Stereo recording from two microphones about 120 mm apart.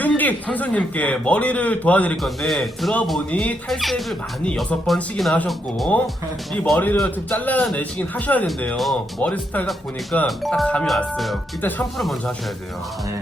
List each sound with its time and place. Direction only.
0.0 s a man's voice: 15° left (ahead or behind)
2.2 s a man's voice: centre (ahead or behind)
8.7 s speech: centre (ahead or behind)